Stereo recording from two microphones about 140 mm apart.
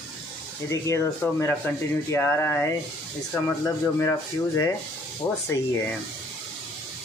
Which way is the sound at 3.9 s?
20° left (ahead or behind).